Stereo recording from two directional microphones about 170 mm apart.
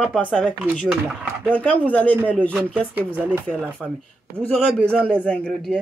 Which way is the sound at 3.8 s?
5° left (ahead or behind).